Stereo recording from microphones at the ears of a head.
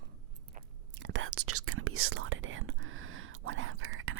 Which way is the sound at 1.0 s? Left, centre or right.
Right.